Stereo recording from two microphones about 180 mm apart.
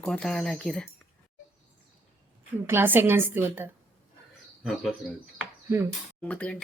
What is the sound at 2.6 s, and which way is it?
A woman's voice, 10° right (ahead or behind).